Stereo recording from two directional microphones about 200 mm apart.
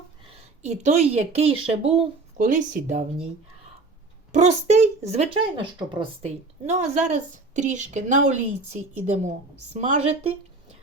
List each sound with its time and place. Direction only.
0.6 s speech: 35° right (ahead or behind)
4.3 s speech: 35° right (ahead or behind)